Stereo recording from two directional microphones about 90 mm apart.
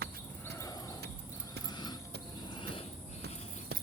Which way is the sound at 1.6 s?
50° left (ahead or behind).